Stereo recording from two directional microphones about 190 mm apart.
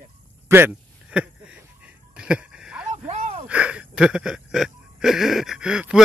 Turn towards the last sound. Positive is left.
turn(degrees=-5)  # may be behind; listen again after turning